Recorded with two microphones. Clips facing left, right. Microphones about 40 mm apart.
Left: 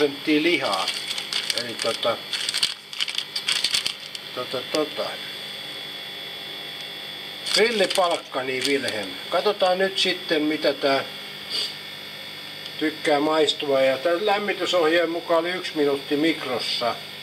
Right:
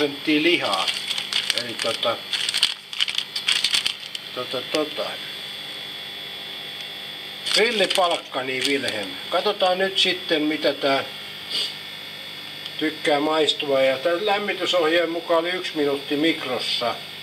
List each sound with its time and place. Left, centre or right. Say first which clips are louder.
0.0 s speech: even; centre
2.0 s crumpling: right 1 dB; centre
4.4 s speech: even; centre
7.4 s speech: even; right
12.7 s speech: even; centre